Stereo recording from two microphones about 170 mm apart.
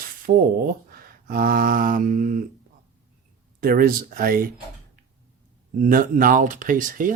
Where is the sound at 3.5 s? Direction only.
60° right (ahead or behind).